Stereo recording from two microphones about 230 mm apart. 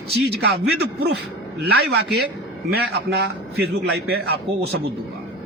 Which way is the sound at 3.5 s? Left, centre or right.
Right.